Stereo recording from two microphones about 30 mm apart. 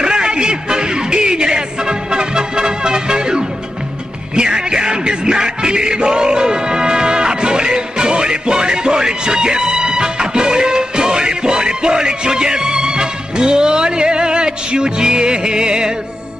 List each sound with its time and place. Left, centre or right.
0.0 s music: right